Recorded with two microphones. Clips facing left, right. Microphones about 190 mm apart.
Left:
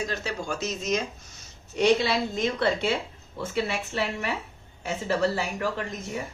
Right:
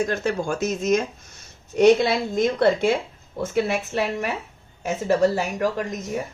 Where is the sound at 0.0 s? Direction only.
55° right (ahead or behind).